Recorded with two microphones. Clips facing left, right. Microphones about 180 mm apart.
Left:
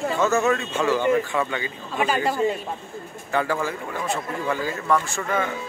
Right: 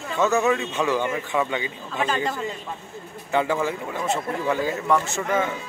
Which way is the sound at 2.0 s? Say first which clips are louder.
Left 2 dB; 10° left (ahead or behind).